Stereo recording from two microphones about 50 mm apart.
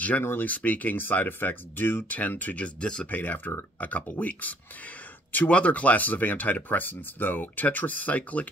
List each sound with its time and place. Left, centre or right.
0.2 s speech: left
0.5 s speech: left
2.0 s speech: left
3.1 s speech: left